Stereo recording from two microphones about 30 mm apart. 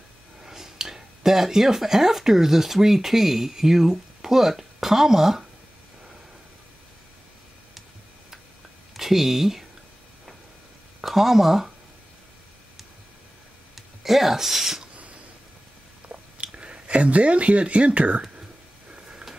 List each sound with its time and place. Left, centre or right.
0.4 s speech: centre
8.9 s speech: centre
11.1 s speech: centre
13.7 s speech: centre
16.1 s chewing: right
18.9 s a sound: right